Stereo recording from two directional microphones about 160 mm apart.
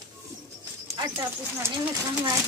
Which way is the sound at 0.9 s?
20° right (ahead or behind).